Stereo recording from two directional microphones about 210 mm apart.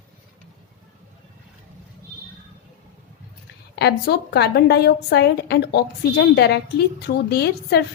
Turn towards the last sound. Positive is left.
turn(degrees=50)  # may be behind; listen again after turning